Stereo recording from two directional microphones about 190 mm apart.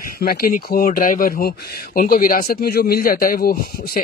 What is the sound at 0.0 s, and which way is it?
Speech, 50° left (ahead or behind).